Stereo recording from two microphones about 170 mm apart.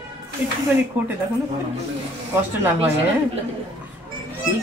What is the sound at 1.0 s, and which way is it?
Speech, 10° right (ahead or behind).